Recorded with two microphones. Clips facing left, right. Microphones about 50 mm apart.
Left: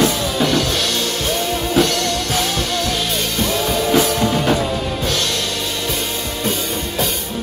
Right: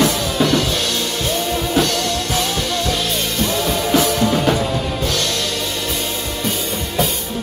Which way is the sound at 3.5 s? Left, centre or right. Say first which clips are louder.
Left 1 dB; centre.